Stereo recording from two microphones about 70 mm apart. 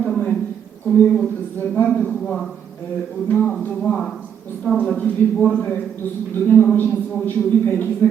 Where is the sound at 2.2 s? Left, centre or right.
Centre.